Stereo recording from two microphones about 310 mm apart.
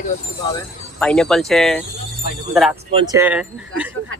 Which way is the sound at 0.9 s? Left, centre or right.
Centre.